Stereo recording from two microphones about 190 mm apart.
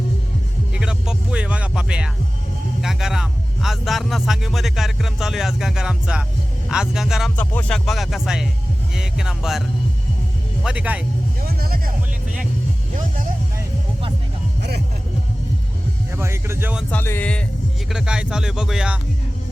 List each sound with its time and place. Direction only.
0.7 s speech: 5° right (ahead or behind)
11.4 s music: 50° right (ahead or behind)
16.1 s speech: 15° right (ahead or behind)
16.9 s speech: 10° left (ahead or behind)
17.8 s speech: 5° right (ahead or behind)